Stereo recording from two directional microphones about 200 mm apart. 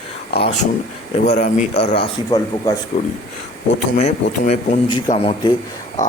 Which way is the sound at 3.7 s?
35° left (ahead or behind).